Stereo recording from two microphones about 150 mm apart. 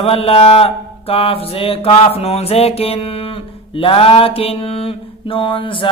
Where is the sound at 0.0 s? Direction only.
40° left (ahead or behind).